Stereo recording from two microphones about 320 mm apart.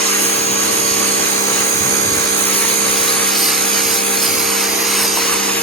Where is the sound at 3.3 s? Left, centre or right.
Centre.